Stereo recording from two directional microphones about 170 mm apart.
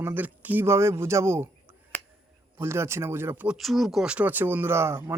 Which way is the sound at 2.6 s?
15° right (ahead or behind).